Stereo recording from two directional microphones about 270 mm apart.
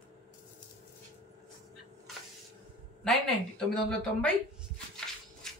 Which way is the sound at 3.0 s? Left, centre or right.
Centre.